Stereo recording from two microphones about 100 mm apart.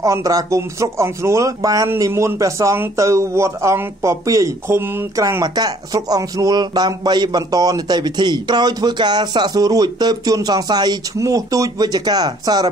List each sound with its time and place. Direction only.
0.0 s a man's voice: 35° right (ahead or behind)
5.4 s a man's voice: 40° right (ahead or behind)